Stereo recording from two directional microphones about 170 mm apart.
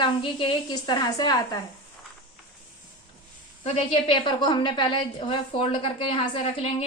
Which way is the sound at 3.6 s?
35° left (ahead or behind).